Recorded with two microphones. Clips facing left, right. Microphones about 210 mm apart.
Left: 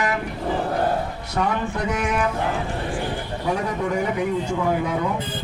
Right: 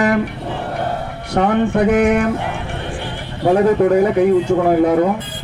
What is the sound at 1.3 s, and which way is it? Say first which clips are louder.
Speech: right 10 dB; 65° right (ahead or behind).